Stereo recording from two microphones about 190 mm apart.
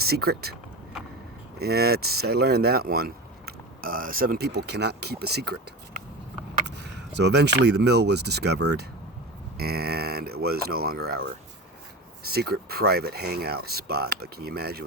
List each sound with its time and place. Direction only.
0.0 s speech: 55° right (ahead or behind)
1.5 s speech: 55° right (ahead or behind)
6.7 s speech: 65° right (ahead or behind)